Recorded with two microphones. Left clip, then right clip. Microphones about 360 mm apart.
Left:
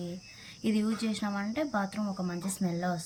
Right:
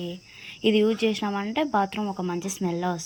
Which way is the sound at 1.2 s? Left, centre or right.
Centre.